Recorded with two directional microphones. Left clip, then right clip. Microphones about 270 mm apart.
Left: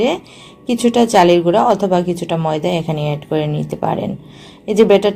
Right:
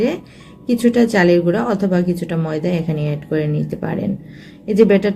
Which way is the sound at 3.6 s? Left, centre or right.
Left.